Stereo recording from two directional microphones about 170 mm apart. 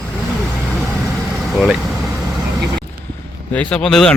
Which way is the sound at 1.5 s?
Centre (ahead or behind).